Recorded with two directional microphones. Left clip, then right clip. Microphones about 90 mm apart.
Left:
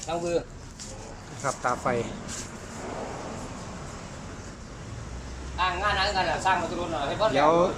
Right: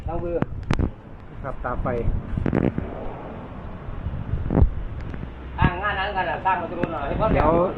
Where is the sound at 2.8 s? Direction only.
35° left (ahead or behind).